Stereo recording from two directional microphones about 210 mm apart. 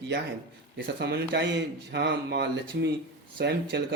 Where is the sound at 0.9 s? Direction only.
50° right (ahead or behind).